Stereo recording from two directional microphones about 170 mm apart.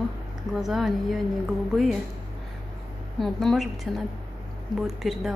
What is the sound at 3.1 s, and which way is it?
Speech, centre (ahead or behind).